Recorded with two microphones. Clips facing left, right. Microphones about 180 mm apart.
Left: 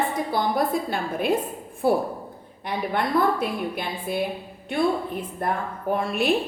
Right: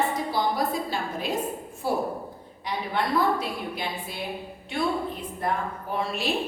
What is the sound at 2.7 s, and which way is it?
A woman's voice, 55° left (ahead or behind).